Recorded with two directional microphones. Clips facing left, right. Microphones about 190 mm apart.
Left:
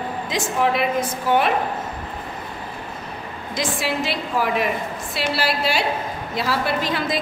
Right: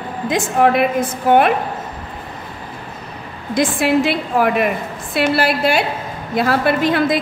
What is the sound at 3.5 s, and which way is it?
A woman's voice, 55° right (ahead or behind).